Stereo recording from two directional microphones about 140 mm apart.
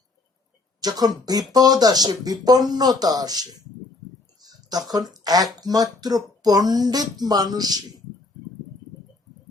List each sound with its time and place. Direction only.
0.8 s speech: 30° right (ahead or behind)
4.4 s a sound: 30° right (ahead or behind)
5.1 s speech: 30° right (ahead or behind)